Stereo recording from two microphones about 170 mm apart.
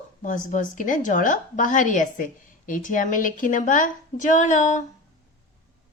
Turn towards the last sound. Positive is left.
turn(degrees=45)  # may be behind; listen again after turning